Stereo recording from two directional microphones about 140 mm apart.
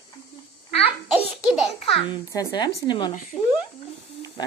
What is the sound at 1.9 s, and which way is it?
A child's voice, 30° left (ahead or behind).